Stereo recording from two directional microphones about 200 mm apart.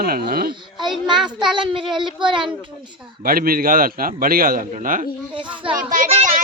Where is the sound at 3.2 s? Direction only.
45° right (ahead or behind).